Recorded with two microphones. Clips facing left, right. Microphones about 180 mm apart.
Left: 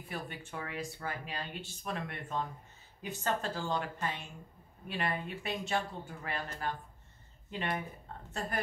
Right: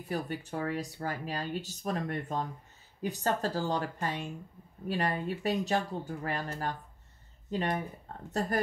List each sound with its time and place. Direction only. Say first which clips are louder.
0.1 s speech: right 7 dB; 40° right (ahead or behind)